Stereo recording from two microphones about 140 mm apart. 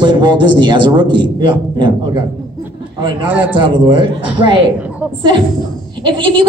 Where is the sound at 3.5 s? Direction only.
35° right (ahead or behind).